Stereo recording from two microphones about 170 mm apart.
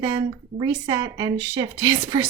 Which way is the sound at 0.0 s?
25° right (ahead or behind).